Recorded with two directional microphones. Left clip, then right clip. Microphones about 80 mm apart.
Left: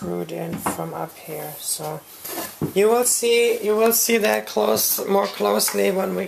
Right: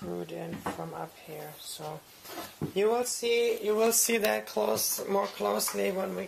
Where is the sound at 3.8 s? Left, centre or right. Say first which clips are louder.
Left 8 dB; right.